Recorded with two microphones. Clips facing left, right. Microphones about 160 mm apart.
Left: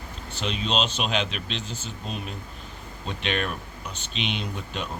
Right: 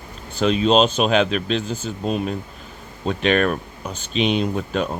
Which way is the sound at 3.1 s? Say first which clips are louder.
Right 10 dB; 45° right (ahead or behind).